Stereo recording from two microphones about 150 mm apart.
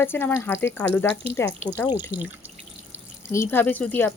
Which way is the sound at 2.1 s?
90° left.